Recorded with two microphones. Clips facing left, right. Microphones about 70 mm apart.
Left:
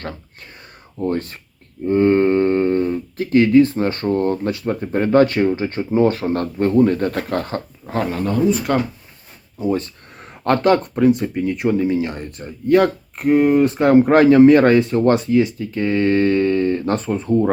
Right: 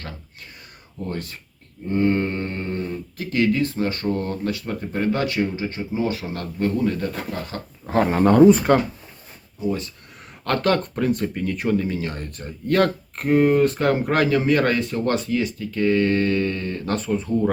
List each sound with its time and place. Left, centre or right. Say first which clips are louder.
0.9 s speech: left 8 dB; left
7.1 s speech: left 7 dB; left
7.9 s speech: right 4 dB; centre
9.6 s a sound: left 5 dB; left
10.4 s speech: left 5 dB; left; by 13.7 s centre
13.7 s speech: left 8 dB; left